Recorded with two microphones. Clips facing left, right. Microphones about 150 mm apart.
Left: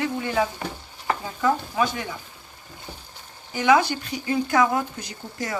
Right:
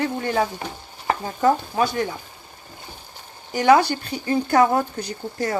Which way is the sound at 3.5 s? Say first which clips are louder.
Right 3 dB; 40° right (ahead or behind).